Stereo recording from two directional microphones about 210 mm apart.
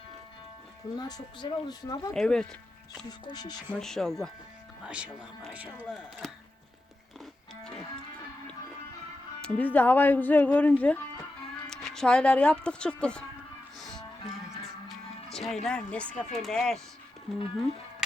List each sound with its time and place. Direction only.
0.9 s speech: 20° left (ahead or behind)
2.1 s speech: 5° left (ahead or behind)
3.1 s speech: 20° left (ahead or behind)
3.7 s speech: centre (ahead or behind)
9.4 s speech: 10° left (ahead or behind)
14.8 s music: centre (ahead or behind)
15.6 s speech: 5° left (ahead or behind)